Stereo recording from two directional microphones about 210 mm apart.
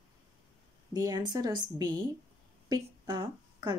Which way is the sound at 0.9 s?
20° right (ahead or behind).